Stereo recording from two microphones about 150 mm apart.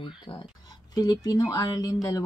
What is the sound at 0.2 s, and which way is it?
A woman's voice, 35° left (ahead or behind).